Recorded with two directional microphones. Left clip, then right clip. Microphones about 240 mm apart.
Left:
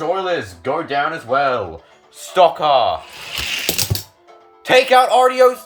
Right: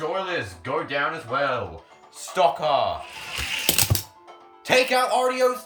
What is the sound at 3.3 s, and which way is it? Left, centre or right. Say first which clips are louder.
Coin: left 6 dB; left.